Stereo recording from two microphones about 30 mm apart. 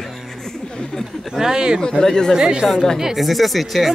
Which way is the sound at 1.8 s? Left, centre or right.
Centre.